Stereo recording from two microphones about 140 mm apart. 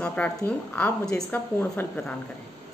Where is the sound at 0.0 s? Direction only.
10° left (ahead or behind).